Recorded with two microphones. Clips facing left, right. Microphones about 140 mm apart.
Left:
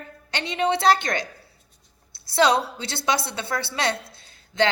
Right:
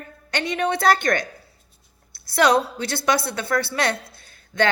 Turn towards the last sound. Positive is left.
turn(degrees=20)  # may be behind; listen again after turning